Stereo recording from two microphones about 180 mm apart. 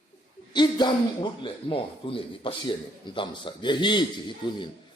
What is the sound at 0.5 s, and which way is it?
Speech, 25° left (ahead or behind).